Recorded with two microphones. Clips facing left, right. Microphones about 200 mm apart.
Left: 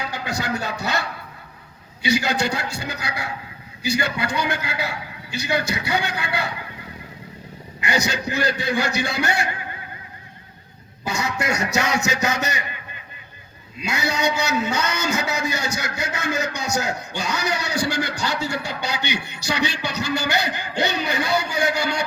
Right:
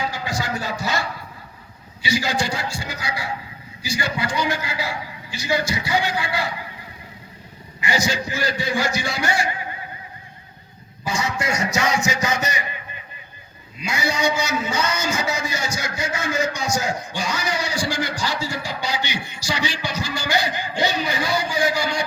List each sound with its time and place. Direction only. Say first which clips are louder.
0.0 s a man's voice: right 1 dB; 60° left (ahead or behind)
7.8 s a man's voice: right 1 dB; 60° left (ahead or behind)
11.0 s a man's voice: even; 65° left (ahead or behind)
13.8 s a man's voice: right 1 dB; 65° left (ahead or behind)